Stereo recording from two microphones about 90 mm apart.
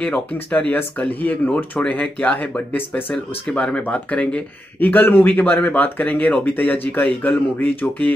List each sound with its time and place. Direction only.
0.0 s speech: 15° left (ahead or behind)